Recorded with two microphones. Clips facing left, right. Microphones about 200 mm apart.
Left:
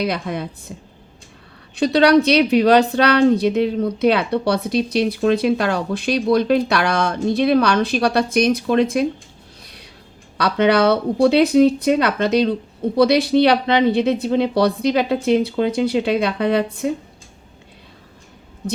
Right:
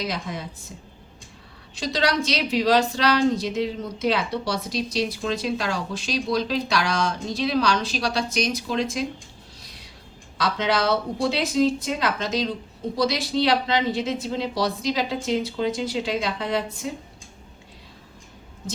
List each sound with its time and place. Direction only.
0.0 s a woman's voice: 60° left (ahead or behind)
10.3 s a woman's voice: 60° left (ahead or behind)